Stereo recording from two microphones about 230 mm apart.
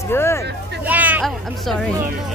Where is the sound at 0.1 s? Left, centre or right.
Centre.